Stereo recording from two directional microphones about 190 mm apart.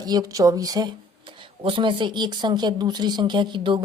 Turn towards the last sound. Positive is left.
turn(degrees=-25)  # may be behind; listen again after turning